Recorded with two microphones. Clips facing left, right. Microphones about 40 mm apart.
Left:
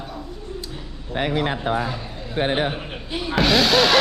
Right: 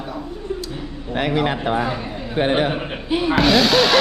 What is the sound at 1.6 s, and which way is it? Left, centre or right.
Speech, right.